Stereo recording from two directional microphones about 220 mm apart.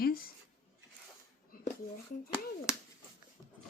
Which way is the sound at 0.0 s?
40° left (ahead or behind).